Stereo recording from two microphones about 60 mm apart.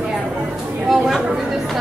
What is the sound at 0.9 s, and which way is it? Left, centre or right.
Chatter, centre.